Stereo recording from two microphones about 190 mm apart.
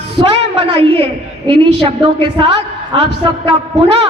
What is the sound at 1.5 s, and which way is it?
Speech, 30° right (ahead or behind).